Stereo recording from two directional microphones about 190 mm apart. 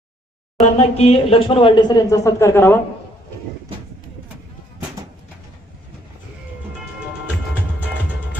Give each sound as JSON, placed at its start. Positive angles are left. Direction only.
{"t": 0.6, "sound": "speech", "side_deg": 35}